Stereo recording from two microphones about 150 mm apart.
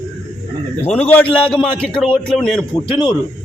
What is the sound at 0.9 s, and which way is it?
A man's voice, 10° left (ahead or behind).